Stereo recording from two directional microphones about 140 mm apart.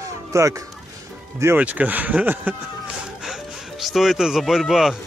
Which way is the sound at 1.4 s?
15° right (ahead or behind).